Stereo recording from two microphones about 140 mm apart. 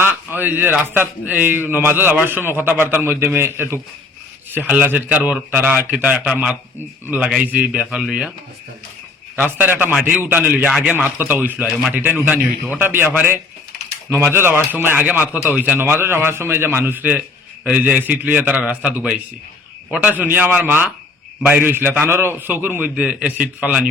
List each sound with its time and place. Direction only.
0.3 s a man's voice: 15° right (ahead or behind)
9.3 s a man's voice: 15° right (ahead or behind)